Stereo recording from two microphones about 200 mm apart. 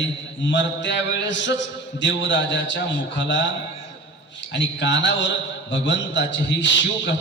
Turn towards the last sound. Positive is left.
turn(degrees=65)  # may be behind; listen again after turning